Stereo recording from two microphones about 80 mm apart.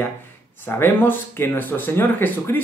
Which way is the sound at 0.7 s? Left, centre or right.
Left.